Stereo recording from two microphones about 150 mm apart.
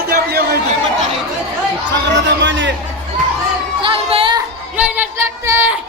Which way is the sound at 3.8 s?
40° right (ahead or behind).